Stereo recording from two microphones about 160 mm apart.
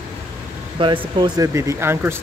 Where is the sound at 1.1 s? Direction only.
20° right (ahead or behind).